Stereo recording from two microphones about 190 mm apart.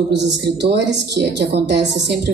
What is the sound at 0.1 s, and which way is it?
Speech, 60° right (ahead or behind).